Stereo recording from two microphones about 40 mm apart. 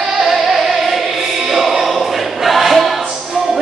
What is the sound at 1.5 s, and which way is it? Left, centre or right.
Choir, centre.